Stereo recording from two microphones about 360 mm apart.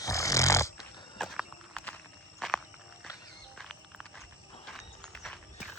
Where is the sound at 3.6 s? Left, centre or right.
Centre.